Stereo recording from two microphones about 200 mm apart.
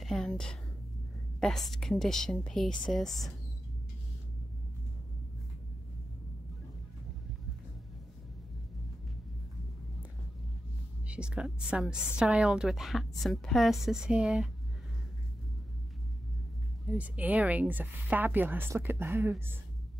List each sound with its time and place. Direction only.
0.0 s a sound: centre (ahead or behind)
1.4 s a woman's voice: centre (ahead or behind)
11.1 s a woman's voice: 5° right (ahead or behind)
16.8 s speech: 5° right (ahead or behind)